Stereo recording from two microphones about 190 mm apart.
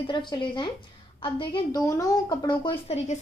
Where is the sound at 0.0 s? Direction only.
25° left (ahead or behind).